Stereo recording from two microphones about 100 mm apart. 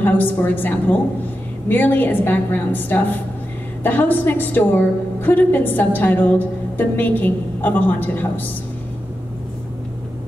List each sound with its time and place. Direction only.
0.0 s a woman's voice: 20° left (ahead or behind)